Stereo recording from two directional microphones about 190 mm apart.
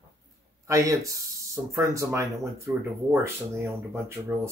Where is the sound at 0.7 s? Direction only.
15° right (ahead or behind).